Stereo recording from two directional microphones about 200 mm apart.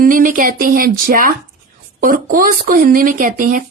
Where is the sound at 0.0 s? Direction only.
40° right (ahead or behind).